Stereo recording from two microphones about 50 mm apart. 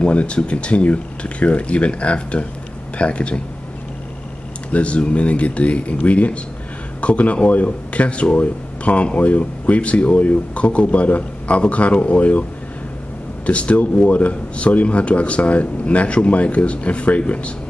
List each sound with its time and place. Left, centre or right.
0.0 s speech: left
4.7 s speech: left
13.5 s speech: left